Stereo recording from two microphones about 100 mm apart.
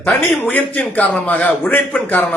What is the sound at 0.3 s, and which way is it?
A man's voice, 20° left (ahead or behind).